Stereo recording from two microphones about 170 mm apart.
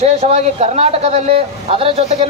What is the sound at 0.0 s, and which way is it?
Speech, 40° right (ahead or behind).